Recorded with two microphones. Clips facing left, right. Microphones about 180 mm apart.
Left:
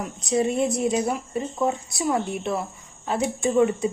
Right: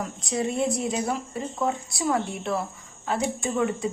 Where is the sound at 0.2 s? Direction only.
20° left (ahead or behind).